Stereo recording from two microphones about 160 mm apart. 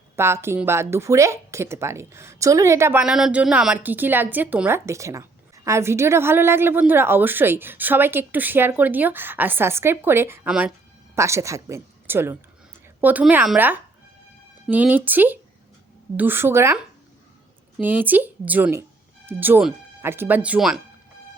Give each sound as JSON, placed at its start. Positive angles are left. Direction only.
{"t": 0.2, "sound": "a woman's voice", "side_deg": -15}
{"t": 3.0, "sound": "a woman's voice", "side_deg": -5}